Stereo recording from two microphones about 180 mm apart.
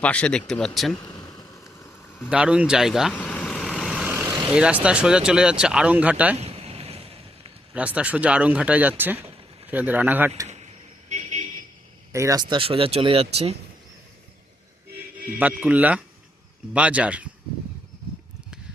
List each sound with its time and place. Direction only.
0.0 s speech: 5° left (ahead or behind)
0.9 s a sound: 20° left (ahead or behind)
2.3 s vehicle: 5° right (ahead or behind)
4.5 s speech: 5° right (ahead or behind)
6.4 s vehicle: 35° right (ahead or behind)
7.7 s speech: 5° right (ahead or behind)
11.1 s a sound: 40° right (ahead or behind)
12.1 s speech: 15° right (ahead or behind); by 13.6 s 35° right (ahead or behind)
15.4 s speech: 10° right (ahead or behind)